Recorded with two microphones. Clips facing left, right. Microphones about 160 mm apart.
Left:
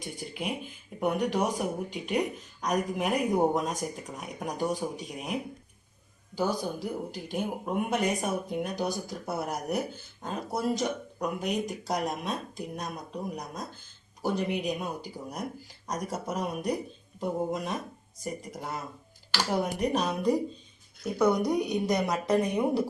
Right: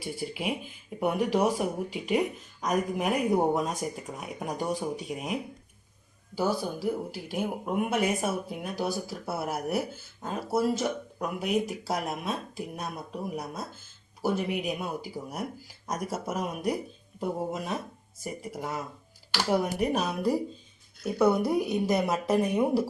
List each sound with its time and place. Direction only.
0.0 s speech: 5° right (ahead or behind)
4.5 s speech: 40° left (ahead or behind)
5.0 s speech: centre (ahead or behind)
6.6 s speech: 5° right (ahead or behind)
19.8 s speech: 5° right (ahead or behind)